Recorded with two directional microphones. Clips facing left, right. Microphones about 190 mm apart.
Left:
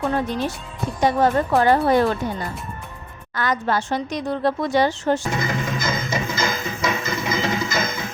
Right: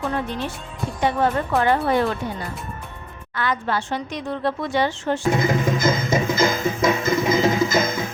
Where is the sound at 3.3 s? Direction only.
40° left (ahead or behind).